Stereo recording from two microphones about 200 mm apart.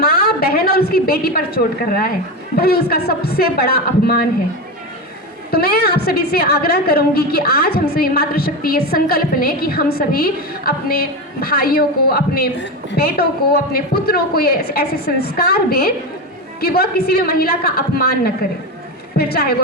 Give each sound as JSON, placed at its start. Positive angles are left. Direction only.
{"t": 0.0, "sound": "a woman's voice", "side_deg": 50}
{"t": 5.5, "sound": "a woman's voice", "side_deg": 50}